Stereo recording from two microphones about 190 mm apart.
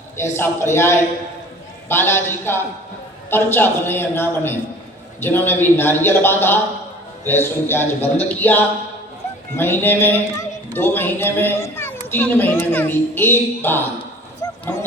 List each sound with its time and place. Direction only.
0.2 s a child's voice: 15° left (ahead or behind)
14.4 s dog: 20° left (ahead or behind)